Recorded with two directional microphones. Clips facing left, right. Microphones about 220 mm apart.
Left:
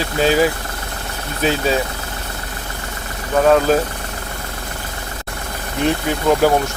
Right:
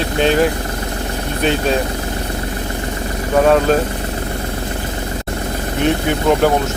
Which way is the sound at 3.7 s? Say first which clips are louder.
Right 1 dB; 5° left (ahead or behind).